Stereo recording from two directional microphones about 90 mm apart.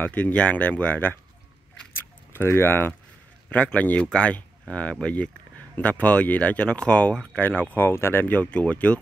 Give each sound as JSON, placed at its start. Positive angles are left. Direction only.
{"t": 0.0, "sound": "speech", "side_deg": 15}
{"t": 2.0, "sound": "keys jangling", "side_deg": 25}
{"t": 3.4, "sound": "speech", "side_deg": 15}